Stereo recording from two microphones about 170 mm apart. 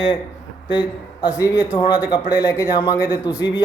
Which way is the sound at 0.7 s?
25° left (ahead or behind).